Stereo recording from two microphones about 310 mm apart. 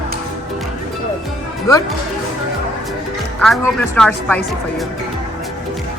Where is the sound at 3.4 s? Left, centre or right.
Centre.